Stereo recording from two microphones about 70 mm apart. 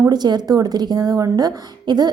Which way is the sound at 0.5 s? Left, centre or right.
Right.